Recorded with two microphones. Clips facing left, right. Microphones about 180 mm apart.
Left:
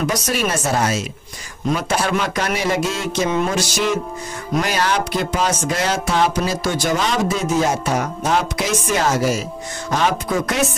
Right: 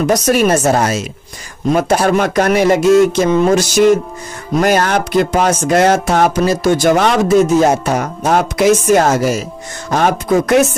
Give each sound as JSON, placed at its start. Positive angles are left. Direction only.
{"t": 0.1, "sound": "music", "side_deg": -45}